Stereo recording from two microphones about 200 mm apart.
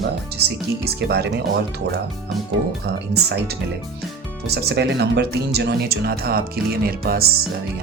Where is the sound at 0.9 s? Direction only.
55° right (ahead or behind).